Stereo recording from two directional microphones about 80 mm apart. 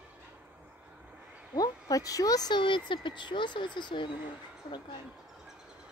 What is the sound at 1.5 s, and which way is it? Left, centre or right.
Speech, left.